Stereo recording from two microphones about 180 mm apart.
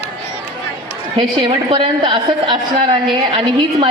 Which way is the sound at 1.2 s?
25° right (ahead or behind).